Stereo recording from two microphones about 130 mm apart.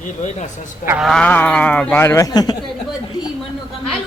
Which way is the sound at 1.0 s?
5° left (ahead or behind).